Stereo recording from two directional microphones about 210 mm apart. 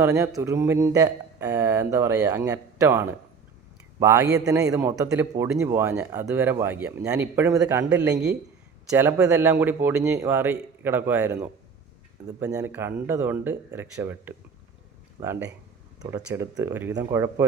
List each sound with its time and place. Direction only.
0.0 s speech: 15° right (ahead or behind)